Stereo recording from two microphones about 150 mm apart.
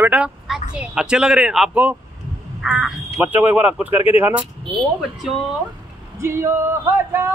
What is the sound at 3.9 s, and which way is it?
Speech, 40° left (ahead or behind).